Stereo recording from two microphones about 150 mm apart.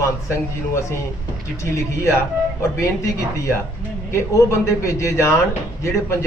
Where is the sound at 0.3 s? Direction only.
20° left (ahead or behind).